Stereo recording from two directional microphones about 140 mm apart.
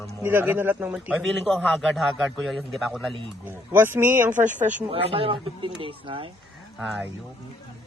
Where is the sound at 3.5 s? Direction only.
15° right (ahead or behind).